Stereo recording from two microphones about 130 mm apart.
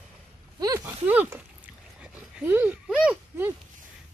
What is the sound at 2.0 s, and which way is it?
Dog, 10° right (ahead or behind).